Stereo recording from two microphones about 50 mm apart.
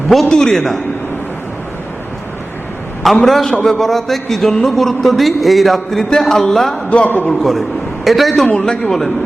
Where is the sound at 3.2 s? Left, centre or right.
Centre.